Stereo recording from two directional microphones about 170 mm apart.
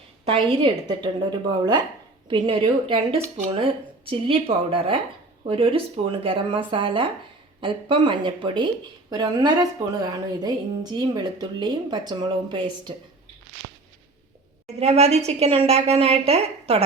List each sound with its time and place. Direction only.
0.3 s speech: 35° right (ahead or behind)
14.8 s speech: 40° right (ahead or behind)